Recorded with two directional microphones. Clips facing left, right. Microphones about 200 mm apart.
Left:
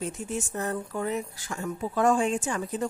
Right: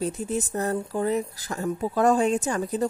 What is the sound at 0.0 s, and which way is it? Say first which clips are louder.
Speech: right 5 dB; 35° right (ahead or behind).